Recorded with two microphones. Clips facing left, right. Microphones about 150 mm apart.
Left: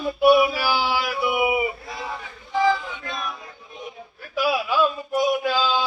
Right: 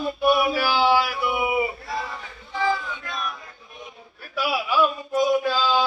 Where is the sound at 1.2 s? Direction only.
20° left (ahead or behind).